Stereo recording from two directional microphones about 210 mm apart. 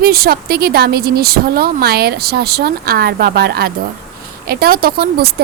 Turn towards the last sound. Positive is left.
turn(degrees=-45)  # may be behind; listen again after turning